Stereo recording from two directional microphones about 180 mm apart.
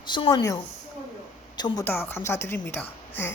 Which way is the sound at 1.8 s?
10° left (ahead or behind).